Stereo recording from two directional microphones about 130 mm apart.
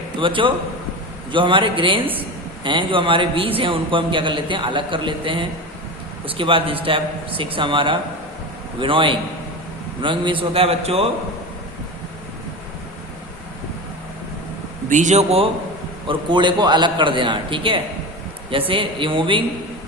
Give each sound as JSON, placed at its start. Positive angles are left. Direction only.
{"t": 0.2, "sound": "a man's voice", "side_deg": -40}
{"t": 14.8, "sound": "a man's voice", "side_deg": -70}
{"t": 16.0, "sound": "a man's voice", "side_deg": -35}